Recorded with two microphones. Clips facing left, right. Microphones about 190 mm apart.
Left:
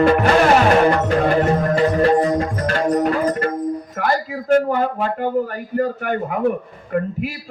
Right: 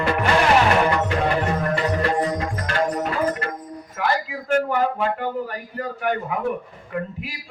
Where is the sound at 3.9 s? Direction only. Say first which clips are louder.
Left 3 dB; 40° left (ahead or behind).